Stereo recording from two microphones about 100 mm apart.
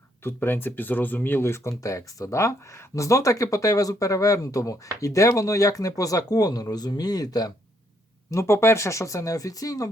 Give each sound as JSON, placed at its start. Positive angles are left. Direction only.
{"t": 0.2, "sound": "speech", "side_deg": 20}
{"t": 8.3, "sound": "speech", "side_deg": 30}